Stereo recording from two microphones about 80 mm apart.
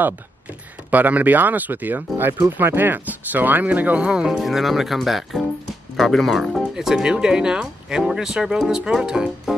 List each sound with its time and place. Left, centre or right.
0.8 s speech: centre